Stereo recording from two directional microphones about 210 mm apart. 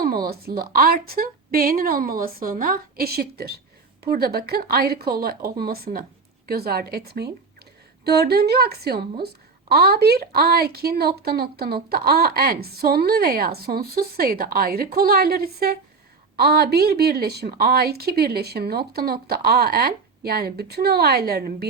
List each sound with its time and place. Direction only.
0.0 s a woman's voice: 45° right (ahead or behind)